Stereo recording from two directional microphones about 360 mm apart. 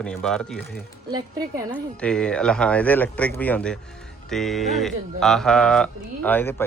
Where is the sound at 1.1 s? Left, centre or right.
Centre.